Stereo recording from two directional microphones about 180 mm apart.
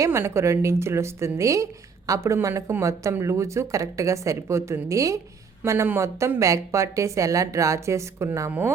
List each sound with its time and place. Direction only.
0.0 s speech: 15° right (ahead or behind)